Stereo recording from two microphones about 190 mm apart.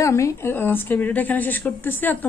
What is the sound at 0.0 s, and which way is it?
A woman's voice, 15° left (ahead or behind).